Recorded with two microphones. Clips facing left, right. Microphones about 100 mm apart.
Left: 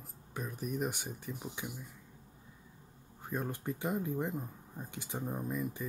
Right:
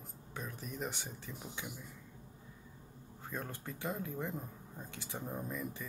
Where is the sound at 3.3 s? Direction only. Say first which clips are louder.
Left 7 dB; 15° left (ahead or behind).